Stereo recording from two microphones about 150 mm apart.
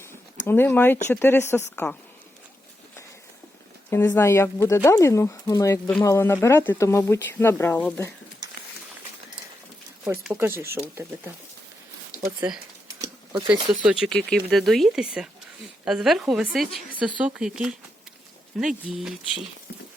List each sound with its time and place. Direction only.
0.0 s a sound: 15° left (ahead or behind)
1.1 s speech: 15° left (ahead or behind)
3.8 s speech: 15° left (ahead or behind)
10.2 s speech: 5° right (ahead or behind)
10.5 s speech: 15° right (ahead or behind)
12.4 s speech: 15° right (ahead or behind)